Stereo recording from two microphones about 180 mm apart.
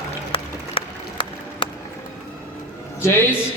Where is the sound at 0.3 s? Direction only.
30° left (ahead or behind).